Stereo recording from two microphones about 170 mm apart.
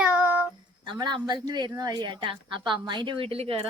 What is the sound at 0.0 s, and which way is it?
Child singing, 5° right (ahead or behind).